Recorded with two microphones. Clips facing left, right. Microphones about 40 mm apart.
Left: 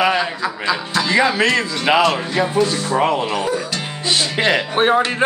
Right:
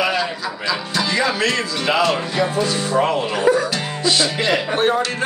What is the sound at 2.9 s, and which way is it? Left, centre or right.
Speech, centre.